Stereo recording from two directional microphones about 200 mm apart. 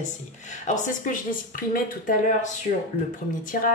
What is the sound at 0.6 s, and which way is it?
Speech, 40° left (ahead or behind).